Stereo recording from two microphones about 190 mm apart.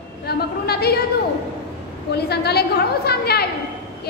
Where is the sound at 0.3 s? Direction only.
55° left (ahead or behind).